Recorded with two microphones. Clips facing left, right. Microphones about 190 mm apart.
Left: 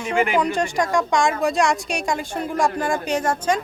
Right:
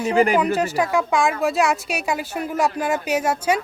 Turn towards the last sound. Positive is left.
turn(degrees=-10)  # may be behind; listen again after turning